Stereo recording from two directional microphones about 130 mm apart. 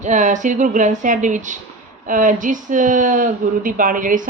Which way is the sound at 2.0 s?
90° right.